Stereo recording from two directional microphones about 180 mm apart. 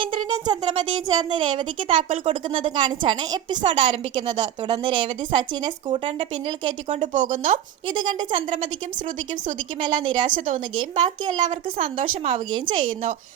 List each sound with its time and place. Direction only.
0.0 s music: 25° right (ahead or behind)
1.0 s a woman's voice: 25° right (ahead or behind); by 7.6 s 45° right (ahead or behind)
7.9 s a woman's voice: 25° right (ahead or behind)
9.8 s a woman's voice: 25° right (ahead or behind)
10.2 s speech: 45° right (ahead or behind)
10.8 s a woman's voice: 25° right (ahead or behind)
11.9 s speech: 35° right (ahead or behind)
12.5 s a woman's voice: 25° right (ahead or behind)